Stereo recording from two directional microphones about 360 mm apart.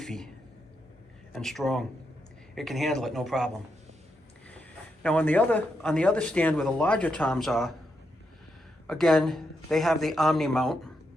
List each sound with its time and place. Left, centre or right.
0.0 s speech: centre
1.3 s speech: centre
5.0 s speech: centre
8.9 s speech: centre